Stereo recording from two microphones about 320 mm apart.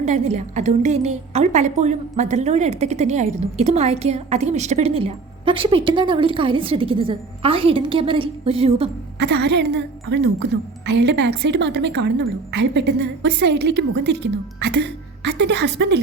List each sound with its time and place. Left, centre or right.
0.0 s a woman's voice: right
9.1 s a woman's voice: right